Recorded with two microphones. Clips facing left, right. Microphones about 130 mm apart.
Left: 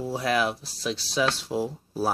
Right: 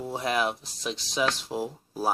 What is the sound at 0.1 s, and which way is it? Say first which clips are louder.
Speech: left 2 dB; 20° right (ahead or behind).